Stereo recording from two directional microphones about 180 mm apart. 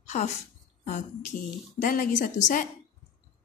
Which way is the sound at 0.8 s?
40° left (ahead or behind).